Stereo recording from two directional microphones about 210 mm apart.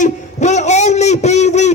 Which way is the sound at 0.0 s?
35° left (ahead or behind).